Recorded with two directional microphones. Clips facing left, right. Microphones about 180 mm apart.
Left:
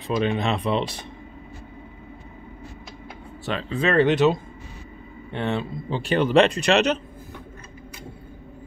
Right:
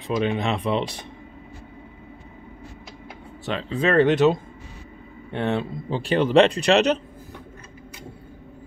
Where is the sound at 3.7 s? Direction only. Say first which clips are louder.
Right 1 dB; 40° right (ahead or behind).